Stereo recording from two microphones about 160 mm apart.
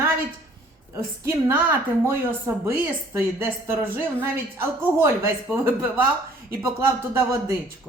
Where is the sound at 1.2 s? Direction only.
15° right (ahead or behind).